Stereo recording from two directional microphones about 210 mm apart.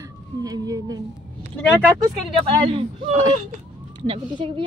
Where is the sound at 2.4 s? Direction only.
30° right (ahead or behind).